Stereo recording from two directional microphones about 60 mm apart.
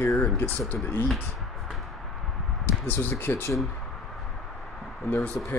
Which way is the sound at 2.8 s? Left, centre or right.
Left.